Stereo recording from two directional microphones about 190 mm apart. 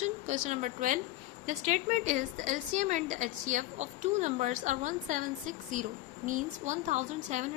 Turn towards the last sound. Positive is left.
turn(degrees=-40)  # may be behind; listen again after turning